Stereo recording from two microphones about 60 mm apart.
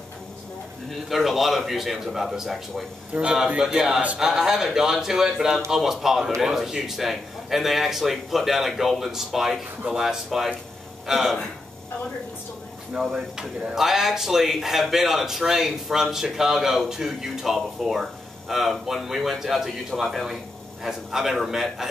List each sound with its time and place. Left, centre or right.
1.0 s a man's voice: centre
3.6 s a man's voice: centre
13.0 s a man's voice: centre